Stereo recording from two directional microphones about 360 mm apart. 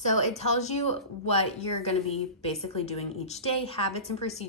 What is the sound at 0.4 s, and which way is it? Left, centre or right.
A woman's voice, centre.